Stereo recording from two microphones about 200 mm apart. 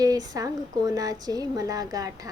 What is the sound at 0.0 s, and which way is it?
A woman's voice, 20° right (ahead or behind).